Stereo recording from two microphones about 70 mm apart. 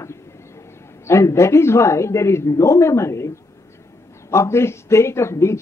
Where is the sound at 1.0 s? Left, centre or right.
Left.